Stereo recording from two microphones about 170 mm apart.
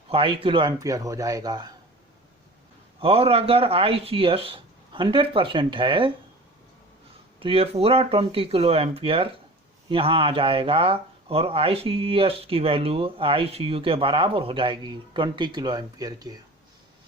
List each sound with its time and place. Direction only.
0.1 s speech: 30° right (ahead or behind)
3.0 s speech: 35° right (ahead or behind)
7.3 s speech: 35° right (ahead or behind)